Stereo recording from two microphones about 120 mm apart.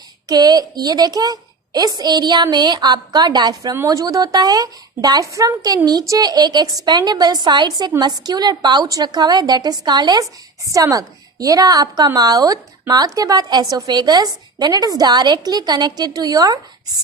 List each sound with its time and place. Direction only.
0.3 s a woman's voice: 35° right (ahead or behind)